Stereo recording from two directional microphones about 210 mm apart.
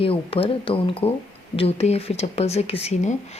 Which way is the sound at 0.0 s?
25° left (ahead or behind).